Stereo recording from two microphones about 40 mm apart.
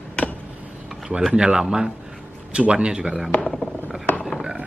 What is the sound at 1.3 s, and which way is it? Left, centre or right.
Speech, centre.